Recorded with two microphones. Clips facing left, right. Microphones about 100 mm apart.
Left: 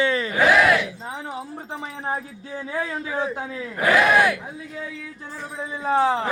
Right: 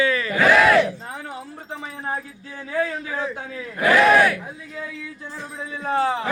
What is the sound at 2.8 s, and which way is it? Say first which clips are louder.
Speech: right 1 dB; 30° left (ahead or behind).